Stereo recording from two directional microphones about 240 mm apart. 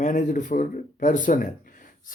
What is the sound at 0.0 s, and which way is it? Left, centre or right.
Speech, left.